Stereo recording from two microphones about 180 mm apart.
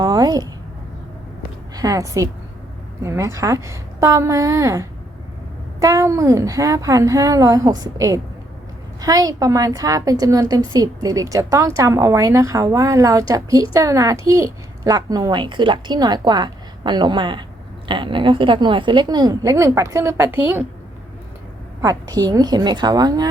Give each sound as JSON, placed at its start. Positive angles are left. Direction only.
{"t": 0.0, "sound": "a sound", "side_deg": -20}
{"t": 1.7, "sound": "a woman's voice", "side_deg": -20}
{"t": 21.8, "sound": "a woman's voice", "side_deg": -20}